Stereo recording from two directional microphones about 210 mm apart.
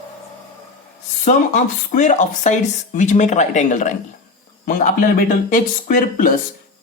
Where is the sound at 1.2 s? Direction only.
35° left (ahead or behind).